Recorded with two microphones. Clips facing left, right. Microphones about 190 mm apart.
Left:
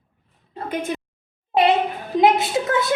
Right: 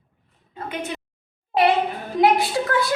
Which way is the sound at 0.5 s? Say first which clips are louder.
Left 4 dB; 40° left (ahead or behind).